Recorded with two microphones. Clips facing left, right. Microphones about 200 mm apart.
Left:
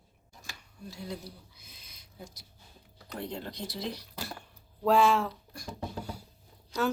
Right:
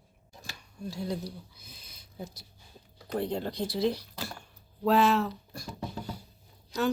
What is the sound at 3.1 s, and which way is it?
Speech, 35° right (ahead or behind).